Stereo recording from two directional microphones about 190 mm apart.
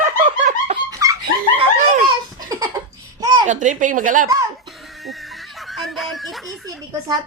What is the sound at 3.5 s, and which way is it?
Speech, 40° right (ahead or behind).